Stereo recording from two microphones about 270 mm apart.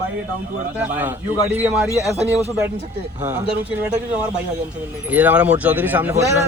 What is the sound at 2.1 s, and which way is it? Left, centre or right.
Speech, right.